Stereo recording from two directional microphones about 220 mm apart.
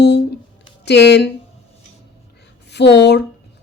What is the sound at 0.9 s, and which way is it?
Speech, 50° left (ahead or behind).